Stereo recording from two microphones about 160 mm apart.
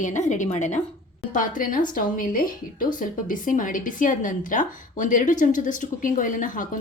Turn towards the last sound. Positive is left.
turn(degrees=55)  # may be behind; listen again after turning